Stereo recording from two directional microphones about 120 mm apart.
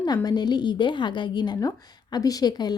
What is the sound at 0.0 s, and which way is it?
Speech, 35° left (ahead or behind).